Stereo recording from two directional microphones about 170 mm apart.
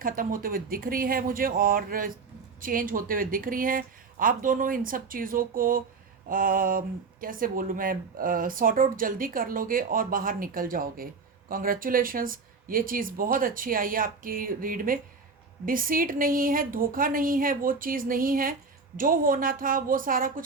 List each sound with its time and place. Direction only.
0.0 s speech: 55° right (ahead or behind)